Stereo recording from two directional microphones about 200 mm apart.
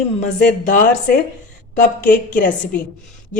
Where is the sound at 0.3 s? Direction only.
45° left (ahead or behind).